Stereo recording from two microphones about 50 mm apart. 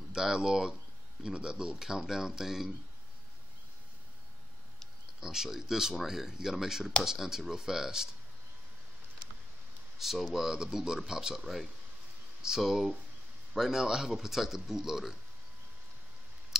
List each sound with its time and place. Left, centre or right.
0.1 s speech: centre
5.2 s speech: centre
9.9 s speech: centre